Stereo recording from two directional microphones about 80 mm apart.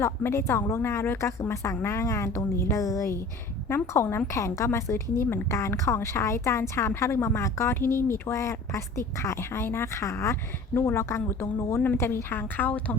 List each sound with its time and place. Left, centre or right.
0.0 s a woman's voice: left